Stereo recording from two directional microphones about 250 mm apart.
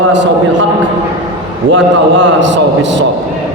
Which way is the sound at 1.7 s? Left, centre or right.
Right.